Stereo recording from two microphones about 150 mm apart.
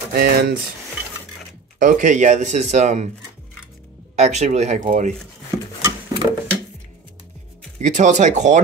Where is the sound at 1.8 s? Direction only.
60° right (ahead or behind).